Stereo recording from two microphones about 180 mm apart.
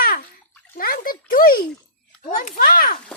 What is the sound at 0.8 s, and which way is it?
A child's voice, 55° left (ahead or behind).